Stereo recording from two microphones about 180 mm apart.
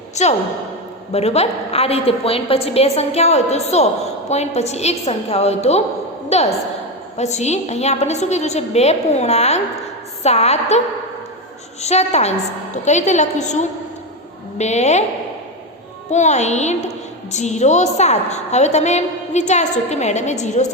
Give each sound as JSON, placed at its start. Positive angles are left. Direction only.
{"t": 0.2, "sound": "a woman's voice", "side_deg": 40}
{"t": 11.8, "sound": "a woman's voice", "side_deg": 40}
{"t": 16.1, "sound": "a woman's voice", "side_deg": 40}